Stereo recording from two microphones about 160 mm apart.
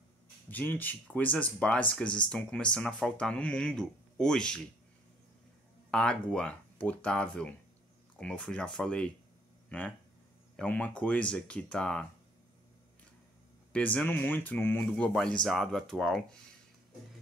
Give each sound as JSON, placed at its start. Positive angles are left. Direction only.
{"t": 0.5, "sound": "speech", "side_deg": 10}
{"t": 5.9, "sound": "speech", "side_deg": 5}
{"t": 13.7, "sound": "speech", "side_deg": 10}